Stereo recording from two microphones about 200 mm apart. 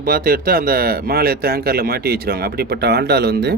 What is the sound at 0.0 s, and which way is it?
Speech, 45° right (ahead or behind).